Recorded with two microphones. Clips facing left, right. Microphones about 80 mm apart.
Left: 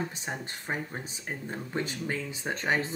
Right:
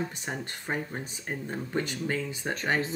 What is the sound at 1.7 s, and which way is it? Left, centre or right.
Speech, centre.